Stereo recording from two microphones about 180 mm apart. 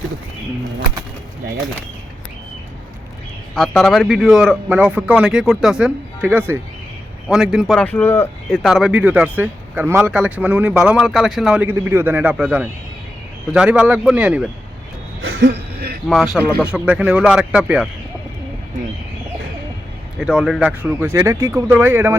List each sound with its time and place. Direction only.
3.5 s speech: centre (ahead or behind)
15.2 s a sound: 85° right; by 16.0 s 65° right (ahead or behind)
16.0 s speech: centre (ahead or behind)
20.1 s speech: 5° right (ahead or behind)